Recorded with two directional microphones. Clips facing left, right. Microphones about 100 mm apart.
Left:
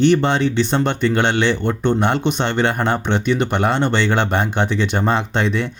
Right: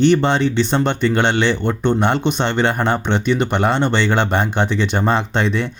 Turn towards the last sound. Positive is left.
turn(degrees=-30)  # may be behind; listen again after turning